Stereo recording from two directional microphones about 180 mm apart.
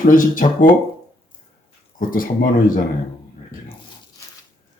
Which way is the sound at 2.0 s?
50° left (ahead or behind).